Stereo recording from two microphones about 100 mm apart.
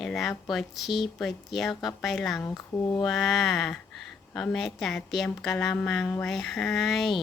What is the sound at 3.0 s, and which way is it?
Speech, 5° left (ahead or behind).